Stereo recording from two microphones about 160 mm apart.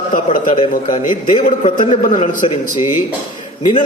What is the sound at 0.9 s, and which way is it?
A man's voice, 50° left (ahead or behind).